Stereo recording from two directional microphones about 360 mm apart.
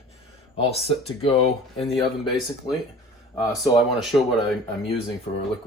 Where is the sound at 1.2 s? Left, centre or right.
Centre.